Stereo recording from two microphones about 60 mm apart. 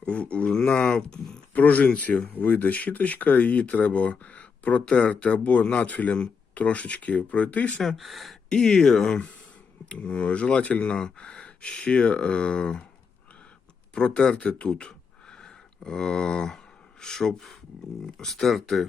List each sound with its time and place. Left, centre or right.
0.0 s speech: left
1.5 s speech: left
7.8 s speech: centre
8.4 s speech: centre
13.9 s speech: centre